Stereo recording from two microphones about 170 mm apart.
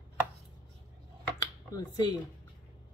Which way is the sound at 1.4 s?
20° left (ahead or behind).